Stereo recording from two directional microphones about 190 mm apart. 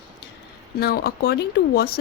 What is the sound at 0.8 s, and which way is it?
Speech, 55° left (ahead or behind).